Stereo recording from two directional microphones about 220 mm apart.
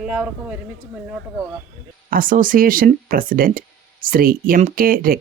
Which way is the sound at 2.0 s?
40° right (ahead or behind).